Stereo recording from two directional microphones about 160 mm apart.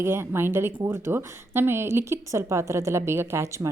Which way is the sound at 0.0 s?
15° right (ahead or behind).